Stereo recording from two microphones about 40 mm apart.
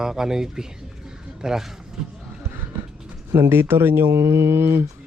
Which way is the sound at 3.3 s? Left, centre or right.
Right.